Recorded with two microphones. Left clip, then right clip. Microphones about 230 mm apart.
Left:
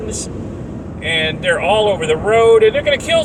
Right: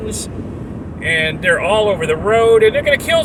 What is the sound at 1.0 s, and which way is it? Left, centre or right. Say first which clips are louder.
Speech: right 1 dB; right.